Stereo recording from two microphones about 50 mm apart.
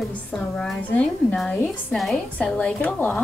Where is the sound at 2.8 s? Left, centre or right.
Left.